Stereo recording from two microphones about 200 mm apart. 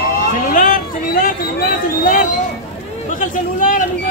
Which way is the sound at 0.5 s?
40° left (ahead or behind).